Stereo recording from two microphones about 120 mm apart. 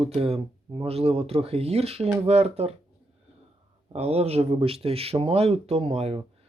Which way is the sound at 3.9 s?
60° right (ahead or behind).